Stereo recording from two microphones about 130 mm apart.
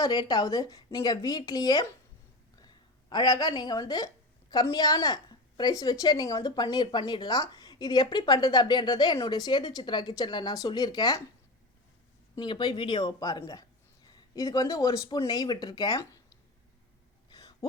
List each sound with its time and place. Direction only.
0.0 s a woman's voice: 30° left (ahead or behind)
12.4 s speech: 30° left (ahead or behind)
17.2 s a sound: 30° left (ahead or behind)